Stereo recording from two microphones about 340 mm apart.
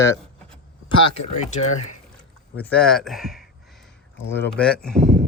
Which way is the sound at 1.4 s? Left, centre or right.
Centre.